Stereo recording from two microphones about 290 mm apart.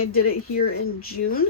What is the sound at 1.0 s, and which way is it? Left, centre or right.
Speech, left.